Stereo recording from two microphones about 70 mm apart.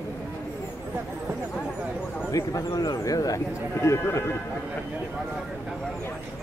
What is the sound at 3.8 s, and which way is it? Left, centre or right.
Speech, left.